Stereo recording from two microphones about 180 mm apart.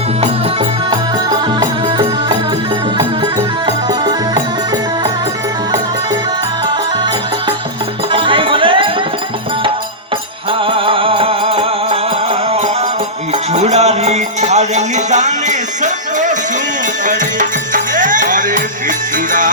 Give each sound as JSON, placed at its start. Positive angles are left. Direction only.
{"t": 8.1, "sound": "music", "side_deg": -30}
{"t": 10.7, "sound": "music", "side_deg": -30}
{"t": 13.5, "sound": "music", "side_deg": -35}
{"t": 17.7, "sound": "music", "side_deg": -45}